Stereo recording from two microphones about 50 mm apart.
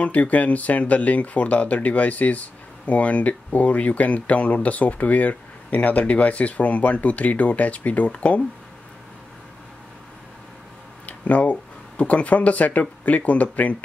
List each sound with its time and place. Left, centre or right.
0.0 s speech: left
11.1 s a sound: left
12.0 s speech: left